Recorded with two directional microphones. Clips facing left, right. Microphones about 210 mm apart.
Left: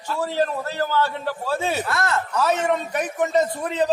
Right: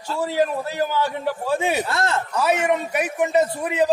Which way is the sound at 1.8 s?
25° right (ahead or behind).